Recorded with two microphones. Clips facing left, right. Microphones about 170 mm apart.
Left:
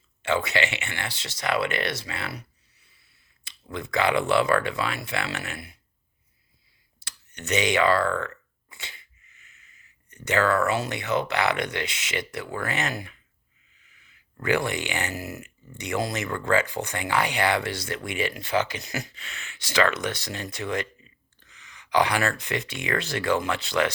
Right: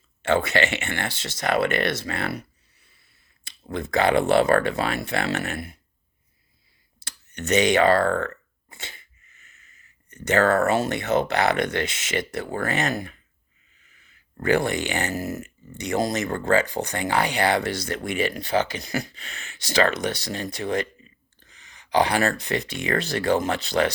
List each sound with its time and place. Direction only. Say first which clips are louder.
0.2 s speech: right 4 dB; 50° right (ahead or behind)
7.3 s speech: right 4 dB; 45° right (ahead or behind)